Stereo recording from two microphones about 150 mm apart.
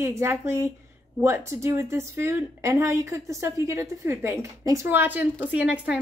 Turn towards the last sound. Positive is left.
turn(degrees=-10)  # may be behind; listen again after turning